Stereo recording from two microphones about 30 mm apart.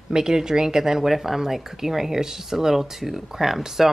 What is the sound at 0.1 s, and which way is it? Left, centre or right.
Speech, centre.